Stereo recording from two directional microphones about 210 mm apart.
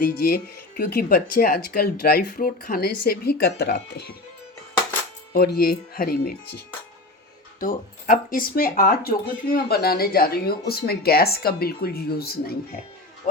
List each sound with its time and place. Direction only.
0.0 s speech: 45° left (ahead or behind)
5.3 s speech: 45° left (ahead or behind)
7.6 s speech: 40° left (ahead or behind)
13.2 s speech: 40° left (ahead or behind)